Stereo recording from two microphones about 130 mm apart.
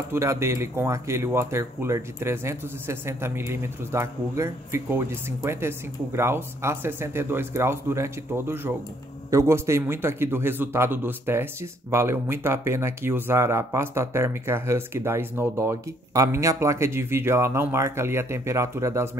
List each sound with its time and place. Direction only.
0.1 s speech: 20° right (ahead or behind)